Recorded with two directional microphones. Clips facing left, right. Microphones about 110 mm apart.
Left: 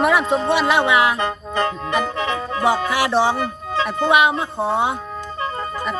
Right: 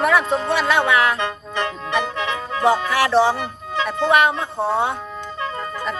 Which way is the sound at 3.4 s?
35° left (ahead or behind).